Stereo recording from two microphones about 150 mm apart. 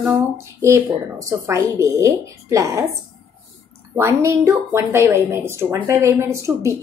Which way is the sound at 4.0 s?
20° right (ahead or behind).